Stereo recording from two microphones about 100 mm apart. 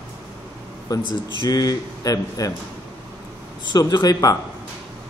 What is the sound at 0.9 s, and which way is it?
A man's voice, 40° left (ahead or behind).